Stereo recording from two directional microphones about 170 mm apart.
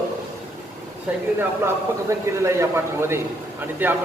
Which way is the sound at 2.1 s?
15° right (ahead or behind).